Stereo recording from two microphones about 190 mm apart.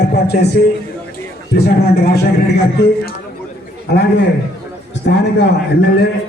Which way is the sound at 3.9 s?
60° left (ahead or behind).